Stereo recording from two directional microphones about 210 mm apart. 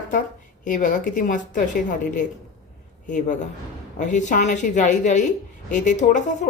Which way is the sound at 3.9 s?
35° left (ahead or behind).